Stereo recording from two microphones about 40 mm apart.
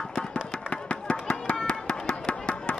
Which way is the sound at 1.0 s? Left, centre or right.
Left.